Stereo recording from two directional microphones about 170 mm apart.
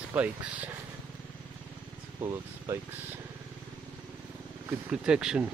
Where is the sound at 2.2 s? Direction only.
15° right (ahead or behind).